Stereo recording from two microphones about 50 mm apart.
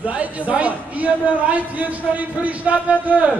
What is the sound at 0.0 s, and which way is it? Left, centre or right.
A man's voice, right.